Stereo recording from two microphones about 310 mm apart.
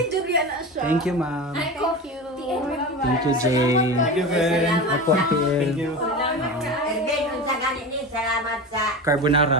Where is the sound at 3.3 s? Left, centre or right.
Centre.